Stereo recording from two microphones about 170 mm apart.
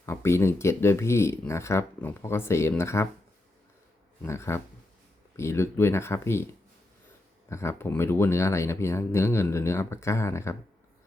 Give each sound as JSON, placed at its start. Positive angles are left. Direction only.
{"t": 0.0, "sound": "speech", "side_deg": 15}
{"t": 4.2, "sound": "speech", "side_deg": 15}
{"t": 7.5, "sound": "speech", "side_deg": 15}